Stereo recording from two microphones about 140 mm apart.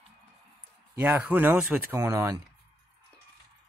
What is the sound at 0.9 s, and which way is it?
Speech, 10° right (ahead or behind).